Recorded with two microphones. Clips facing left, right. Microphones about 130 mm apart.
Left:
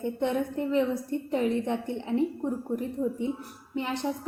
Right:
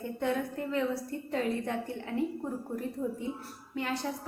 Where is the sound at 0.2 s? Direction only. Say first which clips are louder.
Left 2 dB; 20° left (ahead or behind).